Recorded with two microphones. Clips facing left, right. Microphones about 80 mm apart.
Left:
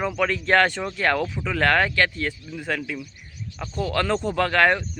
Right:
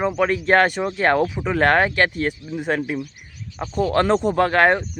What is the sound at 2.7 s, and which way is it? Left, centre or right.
Speech, right.